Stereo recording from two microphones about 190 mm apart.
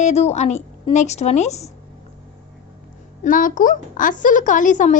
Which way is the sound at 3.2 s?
45° left (ahead or behind).